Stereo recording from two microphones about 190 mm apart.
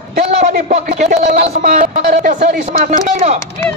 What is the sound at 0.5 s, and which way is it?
A man's voice, 45° right (ahead or behind).